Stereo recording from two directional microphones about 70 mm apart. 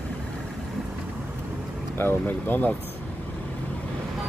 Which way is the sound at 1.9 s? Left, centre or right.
Left.